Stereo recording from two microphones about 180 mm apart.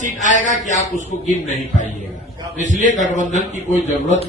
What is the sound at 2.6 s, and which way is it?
Speech, 45° right (ahead or behind).